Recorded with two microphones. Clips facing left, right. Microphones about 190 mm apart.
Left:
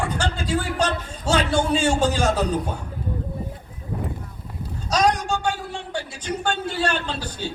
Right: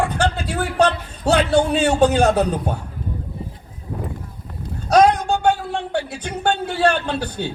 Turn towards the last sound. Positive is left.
turn(degrees=-60)  # may be behind; listen again after turning